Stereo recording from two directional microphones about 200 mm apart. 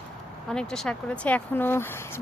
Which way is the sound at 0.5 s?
5° left (ahead or behind).